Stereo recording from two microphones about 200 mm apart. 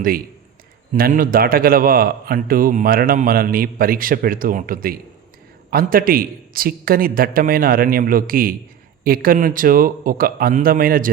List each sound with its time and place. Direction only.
0.9 s a man's voice: 45° right (ahead or behind)